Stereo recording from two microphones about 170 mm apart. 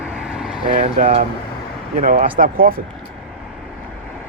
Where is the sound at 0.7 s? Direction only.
40° right (ahead or behind).